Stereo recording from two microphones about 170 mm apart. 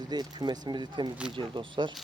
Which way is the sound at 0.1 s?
25° right (ahead or behind).